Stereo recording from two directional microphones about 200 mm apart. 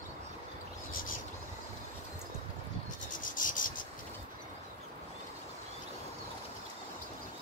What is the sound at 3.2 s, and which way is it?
Rub, 40° left (ahead or behind).